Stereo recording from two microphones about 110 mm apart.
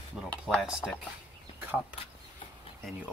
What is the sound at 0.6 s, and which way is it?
Speech, 5° right (ahead or behind).